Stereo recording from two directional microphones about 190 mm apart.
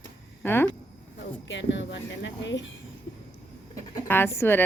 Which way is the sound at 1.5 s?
70° left (ahead or behind).